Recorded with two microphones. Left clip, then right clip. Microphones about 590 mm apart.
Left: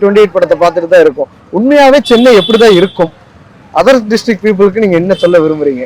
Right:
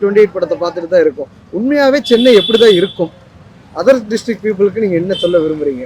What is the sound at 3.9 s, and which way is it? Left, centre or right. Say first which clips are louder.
A man's voice: left 7 dB; centre.